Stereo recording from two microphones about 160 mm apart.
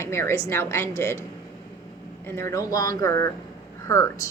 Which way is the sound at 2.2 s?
15° left (ahead or behind).